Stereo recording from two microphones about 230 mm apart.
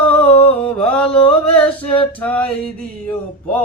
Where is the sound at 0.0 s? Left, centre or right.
Centre.